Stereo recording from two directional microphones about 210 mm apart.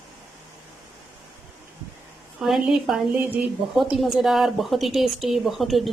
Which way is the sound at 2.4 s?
Centre (ahead or behind).